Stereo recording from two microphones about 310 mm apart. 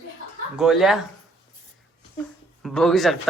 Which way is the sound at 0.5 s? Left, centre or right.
Centre.